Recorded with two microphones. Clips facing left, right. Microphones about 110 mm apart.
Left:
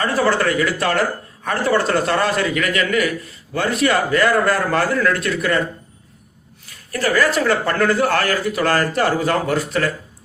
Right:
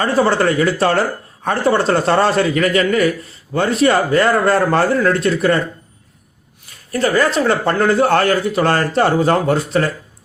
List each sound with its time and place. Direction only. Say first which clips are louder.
0.0 s a man's voice: right 3 dB; 30° right (ahead or behind)
6.9 s a man's voice: right 2 dB; 25° right (ahead or behind)